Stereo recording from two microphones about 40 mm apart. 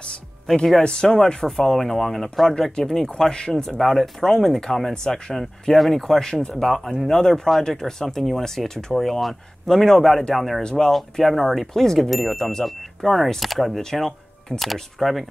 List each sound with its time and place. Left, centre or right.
0.8 s speech: centre
1.8 s speech: centre
7.1 s speech: centre
10.6 s speech: centre
10.9 s speech: centre